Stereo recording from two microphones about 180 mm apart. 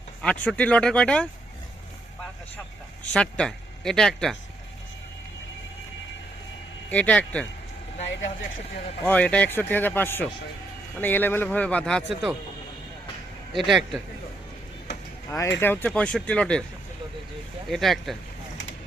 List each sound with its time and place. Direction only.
0.2 s speech: 5° left (ahead or behind)
3.1 s speech: 5° left (ahead or behind)
6.9 s speech: 10° left (ahead or behind)
9.0 s speech: 5° left (ahead or behind)
13.6 s speech: centre (ahead or behind)
15.3 s speech: 15° left (ahead or behind)
17.7 s speech: centre (ahead or behind)